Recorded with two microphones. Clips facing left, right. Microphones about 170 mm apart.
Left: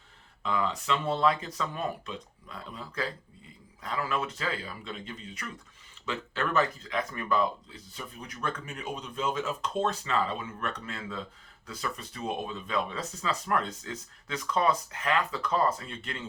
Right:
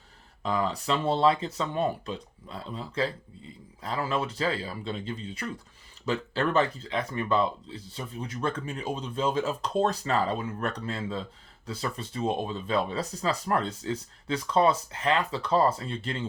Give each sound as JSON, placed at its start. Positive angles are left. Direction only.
{"t": 0.4, "sound": "speech", "side_deg": -35}